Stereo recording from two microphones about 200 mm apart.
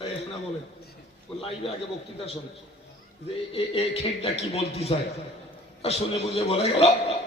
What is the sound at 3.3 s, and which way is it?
A man's voice, 30° left (ahead or behind).